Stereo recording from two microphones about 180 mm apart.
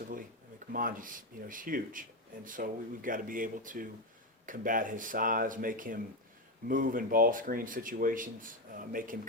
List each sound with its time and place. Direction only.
0.7 s speech: 50° right (ahead or behind)